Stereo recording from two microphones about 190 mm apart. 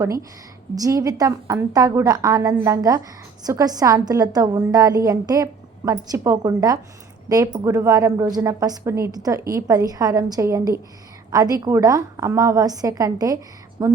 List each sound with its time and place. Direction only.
0.0 s a woman's voice: 15° right (ahead or behind)